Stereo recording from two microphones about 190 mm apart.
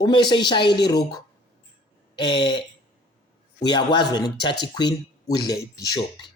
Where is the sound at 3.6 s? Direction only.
25° left (ahead or behind).